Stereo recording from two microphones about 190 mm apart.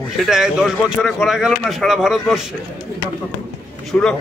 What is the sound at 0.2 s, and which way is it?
A man's voice, 5° right (ahead or behind).